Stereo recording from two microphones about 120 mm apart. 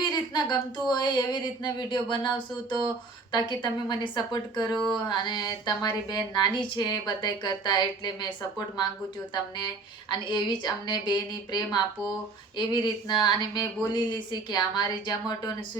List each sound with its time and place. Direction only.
0.1 s speech: 35° left (ahead or behind)
4.7 s a sound: 5° left (ahead or behind)
5.0 s speech: 35° left (ahead or behind)
9.3 s speech: 35° left (ahead or behind)